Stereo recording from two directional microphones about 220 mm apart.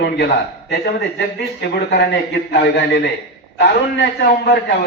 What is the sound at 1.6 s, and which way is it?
A man's voice, 50° left (ahead or behind).